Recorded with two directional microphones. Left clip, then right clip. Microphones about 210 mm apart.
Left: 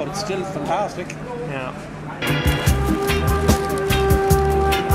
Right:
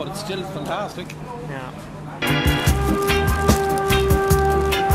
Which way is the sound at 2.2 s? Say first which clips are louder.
Right 1 dB; centre (ahead or behind).